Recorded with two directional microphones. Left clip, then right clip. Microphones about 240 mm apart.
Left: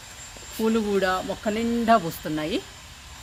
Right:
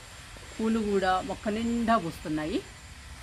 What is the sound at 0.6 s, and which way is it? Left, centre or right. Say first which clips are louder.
Speech: left 5 dB; left.